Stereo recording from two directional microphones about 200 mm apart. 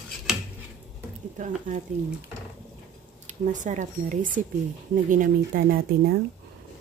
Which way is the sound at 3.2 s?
40° right (ahead or behind).